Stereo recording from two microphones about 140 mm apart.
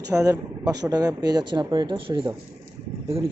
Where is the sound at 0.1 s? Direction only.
25° right (ahead or behind).